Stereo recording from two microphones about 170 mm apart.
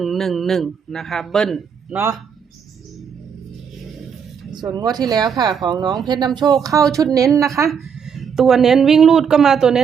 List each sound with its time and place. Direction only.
0.0 s speech: centre (ahead or behind)
4.5 s speech: 20° right (ahead or behind)
7.7 s speech: centre (ahead or behind)